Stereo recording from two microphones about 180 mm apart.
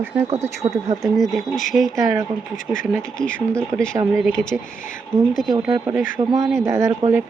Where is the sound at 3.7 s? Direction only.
15° right (ahead or behind).